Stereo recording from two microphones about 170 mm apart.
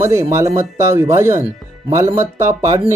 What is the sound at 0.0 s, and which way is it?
Speech, 15° right (ahead or behind).